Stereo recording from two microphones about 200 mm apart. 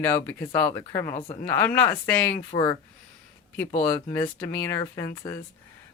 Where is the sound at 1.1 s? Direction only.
35° left (ahead or behind).